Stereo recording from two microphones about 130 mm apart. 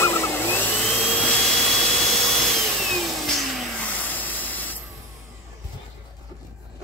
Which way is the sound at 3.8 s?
10° left (ahead or behind).